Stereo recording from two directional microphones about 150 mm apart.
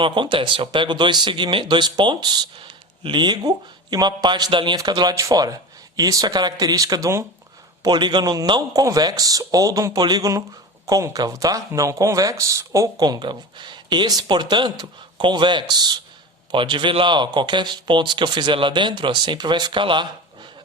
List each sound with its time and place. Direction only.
0.0 s speech: 35° right (ahead or behind)